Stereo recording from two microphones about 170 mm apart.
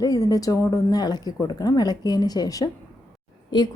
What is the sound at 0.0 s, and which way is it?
Speech, 20° left (ahead or behind).